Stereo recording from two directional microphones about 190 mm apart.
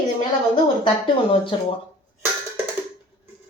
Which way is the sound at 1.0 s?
30° left (ahead or behind).